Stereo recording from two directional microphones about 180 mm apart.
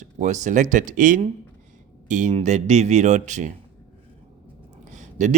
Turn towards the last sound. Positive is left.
turn(degrees=-40)  # may be behind; listen again after turning